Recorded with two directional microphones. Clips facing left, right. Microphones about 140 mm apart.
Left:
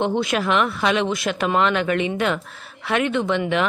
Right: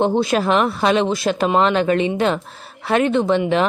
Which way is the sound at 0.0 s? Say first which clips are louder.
Right 4 dB; 35° right (ahead or behind).